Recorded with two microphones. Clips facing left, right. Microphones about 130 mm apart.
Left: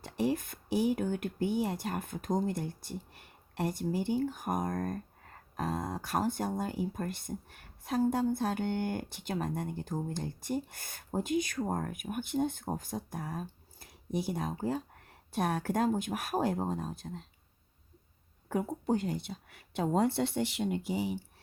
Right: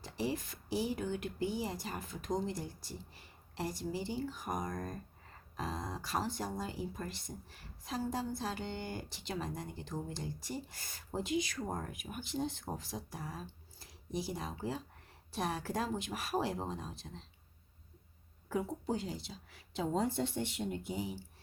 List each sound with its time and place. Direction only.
0.0 s a woman's voice: 55° left (ahead or behind)
18.4 s speech: 55° left (ahead or behind); by 21.2 s 80° left